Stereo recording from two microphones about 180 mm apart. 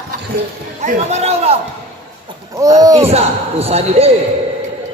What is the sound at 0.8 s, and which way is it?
Speech, 35° right (ahead or behind).